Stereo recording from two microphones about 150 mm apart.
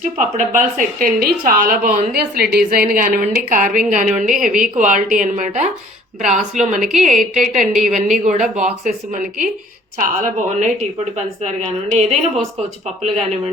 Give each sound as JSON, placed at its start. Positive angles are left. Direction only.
{"t": 0.2, "sound": "speech", "side_deg": -60}
{"t": 7.6, "sound": "a woman's voice", "side_deg": 0}
{"t": 7.9, "sound": "speech", "side_deg": -55}
{"t": 11.4, "sound": "a woman's voice", "side_deg": -45}